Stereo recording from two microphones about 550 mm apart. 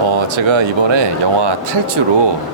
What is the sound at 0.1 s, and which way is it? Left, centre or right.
Speech, right.